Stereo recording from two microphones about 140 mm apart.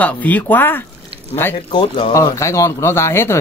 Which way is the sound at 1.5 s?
35° left (ahead or behind).